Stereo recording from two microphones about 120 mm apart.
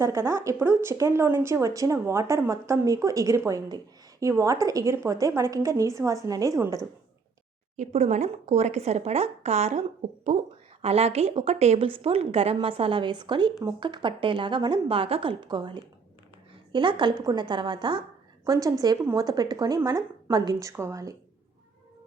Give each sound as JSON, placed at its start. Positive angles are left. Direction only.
{"t": 0.0, "sound": "speech", "side_deg": -25}
{"t": 7.8, "sound": "speech", "side_deg": -70}
{"t": 10.8, "sound": "a woman's voice", "side_deg": -60}
{"t": 18.4, "sound": "speech", "side_deg": -30}